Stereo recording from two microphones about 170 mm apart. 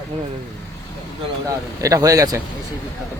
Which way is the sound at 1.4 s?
20° right (ahead or behind).